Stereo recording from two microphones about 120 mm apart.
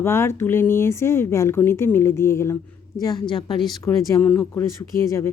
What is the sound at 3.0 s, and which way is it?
Speech, 35° left (ahead or behind).